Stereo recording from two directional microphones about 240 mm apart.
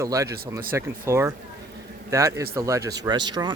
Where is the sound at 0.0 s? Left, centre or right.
Centre.